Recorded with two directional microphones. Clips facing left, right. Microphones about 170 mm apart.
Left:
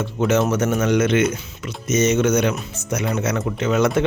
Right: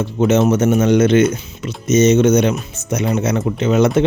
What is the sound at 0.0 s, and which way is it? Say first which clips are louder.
Speech: right 5 dB; 25° right (ahead or behind).